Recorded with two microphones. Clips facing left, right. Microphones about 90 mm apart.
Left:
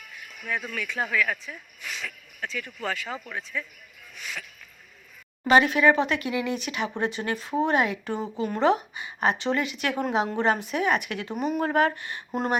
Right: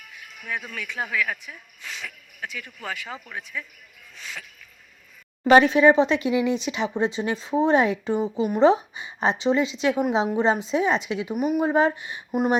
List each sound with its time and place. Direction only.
0.4 s speech: 10° right (ahead or behind)
4.1 s a sound: 25° right (ahead or behind)
5.5 s speech: 30° right (ahead or behind); by 12.5 s 10° right (ahead or behind)